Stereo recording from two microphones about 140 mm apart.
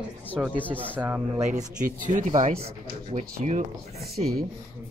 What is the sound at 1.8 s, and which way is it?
Speech, 65° right (ahead or behind).